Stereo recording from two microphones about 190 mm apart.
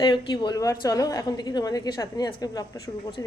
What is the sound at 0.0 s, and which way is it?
A woman's voice, 20° left (ahead or behind).